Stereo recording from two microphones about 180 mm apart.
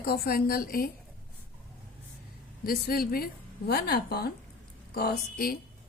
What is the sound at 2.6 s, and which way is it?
A woman's voice, 55° left (ahead or behind).